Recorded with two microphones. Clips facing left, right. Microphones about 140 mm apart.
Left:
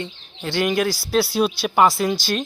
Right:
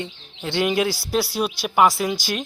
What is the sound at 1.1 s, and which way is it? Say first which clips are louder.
Speech: left 6 dB; 10° right (ahead or behind).